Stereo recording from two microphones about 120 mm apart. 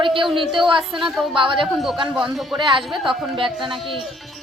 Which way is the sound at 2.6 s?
40° right (ahead or behind).